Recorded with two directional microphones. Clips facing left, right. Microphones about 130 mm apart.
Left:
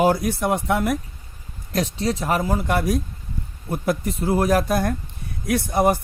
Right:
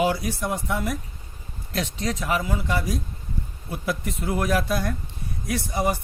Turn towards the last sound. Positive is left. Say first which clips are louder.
# left 6 dB
turn(degrees=55)  # may be behind; listen again after turning